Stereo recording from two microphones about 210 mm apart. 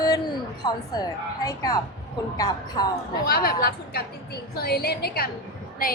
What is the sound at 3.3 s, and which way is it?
Speech, 45° left (ahead or behind).